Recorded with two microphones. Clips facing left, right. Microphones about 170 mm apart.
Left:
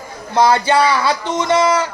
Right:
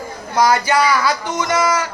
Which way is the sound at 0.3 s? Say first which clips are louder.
Left 2 dB; 25° left (ahead or behind).